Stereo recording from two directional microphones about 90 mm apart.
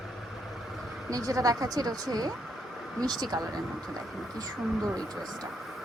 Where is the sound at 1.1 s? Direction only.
40° right (ahead or behind).